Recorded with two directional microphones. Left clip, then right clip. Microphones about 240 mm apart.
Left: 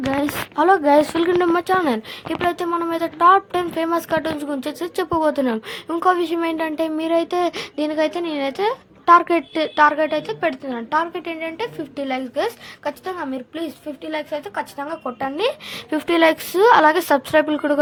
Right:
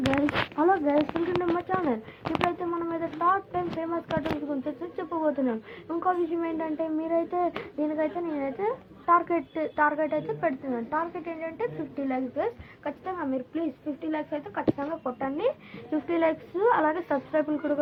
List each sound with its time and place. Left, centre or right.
0.0 s a sound: centre
0.5 s a woman's voice: left
2.2 s speech: centre
2.5 s a woman's voice: left